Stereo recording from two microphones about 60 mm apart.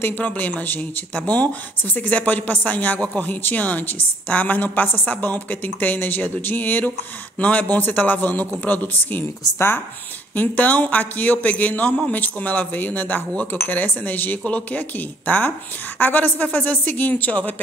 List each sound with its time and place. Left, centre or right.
0.2 s a woman's voice: left
10.3 s a woman's voice: left